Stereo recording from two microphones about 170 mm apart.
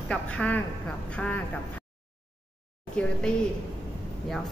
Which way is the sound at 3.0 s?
5° left (ahead or behind).